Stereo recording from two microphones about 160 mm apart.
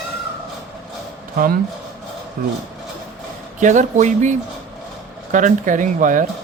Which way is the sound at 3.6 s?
50° right (ahead or behind).